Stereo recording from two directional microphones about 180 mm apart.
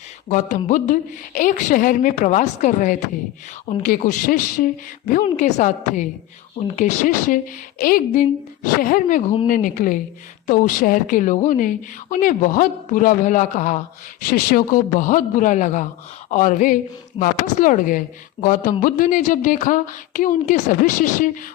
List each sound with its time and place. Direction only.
0.3 s a woman's voice: 45° left (ahead or behind)